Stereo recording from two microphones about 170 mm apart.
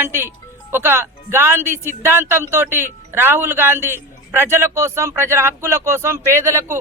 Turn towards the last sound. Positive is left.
turn(degrees=-15)  # may be behind; listen again after turning